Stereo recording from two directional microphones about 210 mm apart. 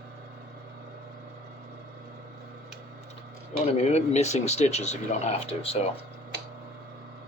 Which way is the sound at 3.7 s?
30° left (ahead or behind).